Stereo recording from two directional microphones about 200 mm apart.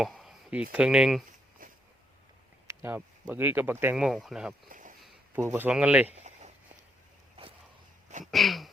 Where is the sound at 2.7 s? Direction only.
10° right (ahead or behind).